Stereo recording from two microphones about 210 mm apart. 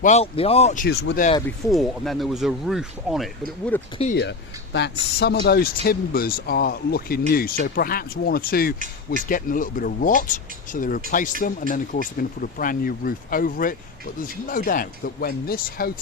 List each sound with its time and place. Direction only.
0.0 s speech: 30° left (ahead or behind)
0.9 s speech: 50° left (ahead or behind)
1.7 s speech: centre (ahead or behind)
3.7 s speech: 10° left (ahead or behind)
4.1 s speech: 55° left (ahead or behind)